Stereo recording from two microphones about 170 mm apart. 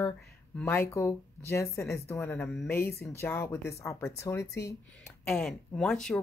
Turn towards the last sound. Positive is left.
turn(degrees=5)  # may be behind; listen again after turning